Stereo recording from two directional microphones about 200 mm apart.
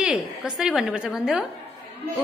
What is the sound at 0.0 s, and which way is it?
A woman's voice, 5° right (ahead or behind).